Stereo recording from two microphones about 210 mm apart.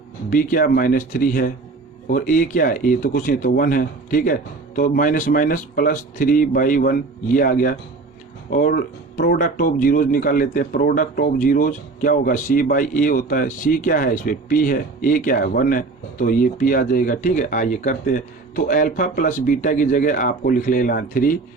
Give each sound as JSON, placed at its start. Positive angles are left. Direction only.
{"t": 0.3, "sound": "speech", "side_deg": 40}